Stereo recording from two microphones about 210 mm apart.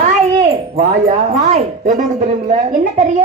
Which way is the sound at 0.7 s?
30° right (ahead or behind).